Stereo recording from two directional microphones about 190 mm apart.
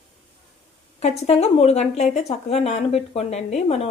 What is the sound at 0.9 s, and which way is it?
Speech, 35° left (ahead or behind).